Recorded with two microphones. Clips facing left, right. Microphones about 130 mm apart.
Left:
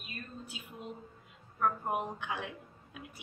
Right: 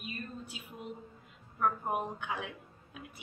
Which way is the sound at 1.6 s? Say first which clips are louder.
Even; centre (ahead or behind).